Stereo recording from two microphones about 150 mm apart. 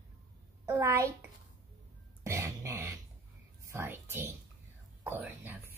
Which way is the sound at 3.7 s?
15° right (ahead or behind).